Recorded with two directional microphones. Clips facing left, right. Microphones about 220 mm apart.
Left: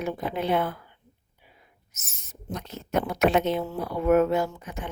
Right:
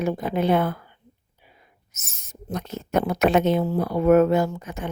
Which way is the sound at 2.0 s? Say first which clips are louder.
Right 4 dB; 45° right (ahead or behind).